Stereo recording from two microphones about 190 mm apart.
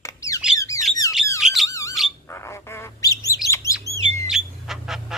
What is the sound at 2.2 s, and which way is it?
Bird, 15° left (ahead or behind).